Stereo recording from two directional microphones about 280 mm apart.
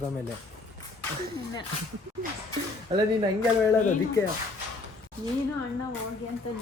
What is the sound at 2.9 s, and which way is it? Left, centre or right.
Speech, centre.